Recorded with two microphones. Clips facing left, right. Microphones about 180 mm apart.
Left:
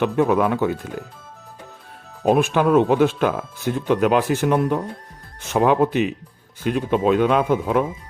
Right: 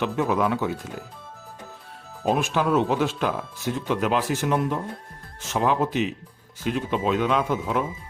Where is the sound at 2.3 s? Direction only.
55° left (ahead or behind).